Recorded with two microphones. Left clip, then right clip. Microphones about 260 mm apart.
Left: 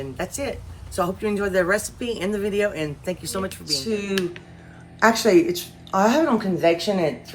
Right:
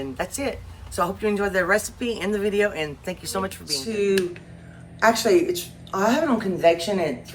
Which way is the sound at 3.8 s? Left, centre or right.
Centre.